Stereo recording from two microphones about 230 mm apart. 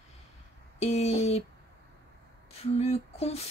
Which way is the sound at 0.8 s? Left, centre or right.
Left.